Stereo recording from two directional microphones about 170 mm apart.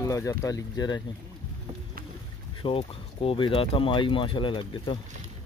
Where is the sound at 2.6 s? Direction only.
30° left (ahead or behind).